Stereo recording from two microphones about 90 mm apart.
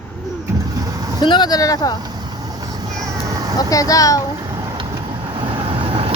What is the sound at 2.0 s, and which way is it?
Vehicle, 50° right (ahead or behind).